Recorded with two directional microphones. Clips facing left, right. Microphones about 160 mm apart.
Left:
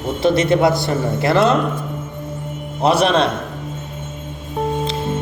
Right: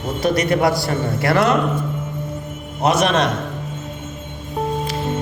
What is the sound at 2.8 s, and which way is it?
Speech, 30° left (ahead or behind).